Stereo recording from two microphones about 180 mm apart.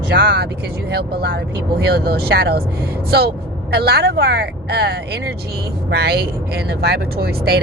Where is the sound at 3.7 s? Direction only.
60° right (ahead or behind).